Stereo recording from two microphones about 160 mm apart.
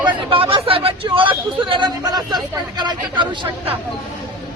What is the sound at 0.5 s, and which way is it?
Speech, 35° right (ahead or behind).